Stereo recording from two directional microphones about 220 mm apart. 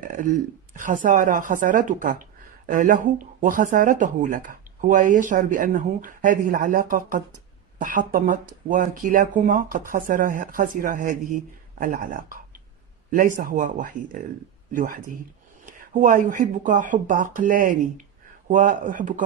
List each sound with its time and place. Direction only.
0.1 s a woman's voice: 35° right (ahead or behind)